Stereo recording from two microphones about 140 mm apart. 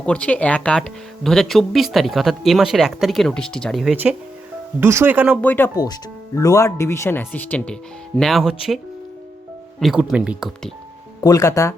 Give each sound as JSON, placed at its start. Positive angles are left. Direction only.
{"t": 0.0, "sound": "speech", "side_deg": 5}
{"t": 4.8, "sound": "speech", "side_deg": -20}
{"t": 5.4, "sound": "speech", "side_deg": 15}
{"t": 5.7, "sound": "speech", "side_deg": 25}
{"t": 9.8, "sound": "speech", "side_deg": -5}
{"t": 11.2, "sound": "speech", "side_deg": 25}